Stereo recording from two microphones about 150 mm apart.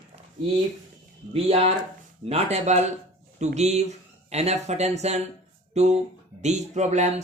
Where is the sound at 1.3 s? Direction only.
40° right (ahead or behind).